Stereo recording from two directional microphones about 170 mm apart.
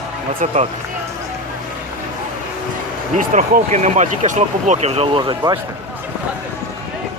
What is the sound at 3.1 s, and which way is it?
Speech, 50° right (ahead or behind).